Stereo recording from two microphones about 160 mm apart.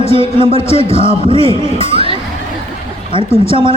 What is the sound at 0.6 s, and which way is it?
Speech, 40° left (ahead or behind).